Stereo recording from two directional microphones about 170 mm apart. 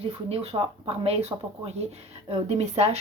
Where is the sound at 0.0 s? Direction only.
35° right (ahead or behind).